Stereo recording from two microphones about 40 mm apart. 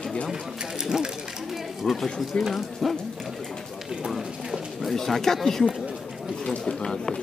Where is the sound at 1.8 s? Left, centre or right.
Centre.